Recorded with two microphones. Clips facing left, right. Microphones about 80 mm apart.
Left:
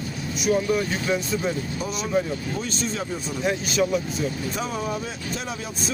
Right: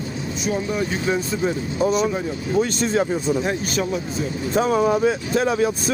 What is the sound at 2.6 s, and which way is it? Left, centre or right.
Speech, right.